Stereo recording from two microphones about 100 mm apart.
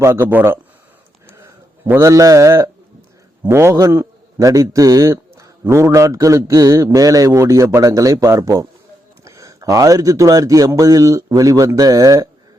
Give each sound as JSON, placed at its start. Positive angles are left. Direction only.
{"t": 0.0, "sound": "a man's voice", "side_deg": -25}